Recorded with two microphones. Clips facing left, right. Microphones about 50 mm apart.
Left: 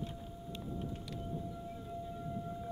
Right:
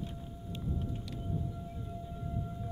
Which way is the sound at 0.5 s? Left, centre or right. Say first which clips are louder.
Right 3 dB; centre.